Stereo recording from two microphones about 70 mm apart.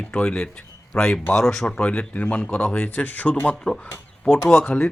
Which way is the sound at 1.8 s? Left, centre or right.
Centre.